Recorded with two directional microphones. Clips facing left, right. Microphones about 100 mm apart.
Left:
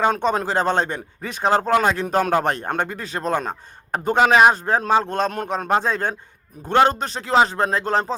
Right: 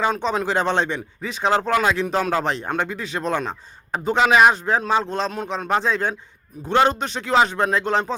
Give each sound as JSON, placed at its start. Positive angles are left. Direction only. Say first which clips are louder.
{"t": 0.0, "sound": "a man's voice", "louder": "left 2 dB", "side_deg": 50}